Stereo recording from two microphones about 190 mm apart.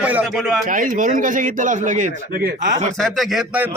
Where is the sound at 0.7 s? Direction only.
45° right (ahead or behind).